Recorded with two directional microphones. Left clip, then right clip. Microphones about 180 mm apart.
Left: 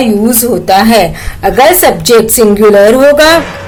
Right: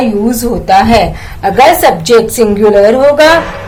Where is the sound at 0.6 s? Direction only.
40° left (ahead or behind).